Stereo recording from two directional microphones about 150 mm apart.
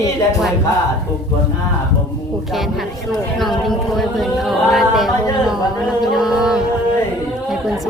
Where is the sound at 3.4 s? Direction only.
Centre (ahead or behind).